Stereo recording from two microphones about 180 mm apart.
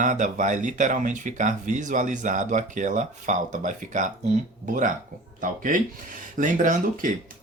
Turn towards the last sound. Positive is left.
turn(degrees=-45)  # may be behind; listen again after turning